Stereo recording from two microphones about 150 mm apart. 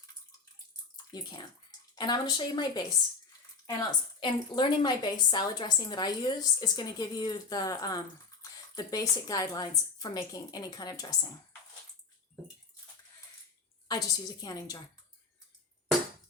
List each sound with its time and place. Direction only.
2.0 s a woman's voice: 25° left (ahead or behind)
13.8 s a woman's voice: 25° left (ahead or behind)